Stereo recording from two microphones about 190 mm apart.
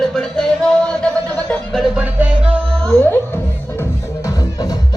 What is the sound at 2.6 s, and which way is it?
Music, 5° left (ahead or behind).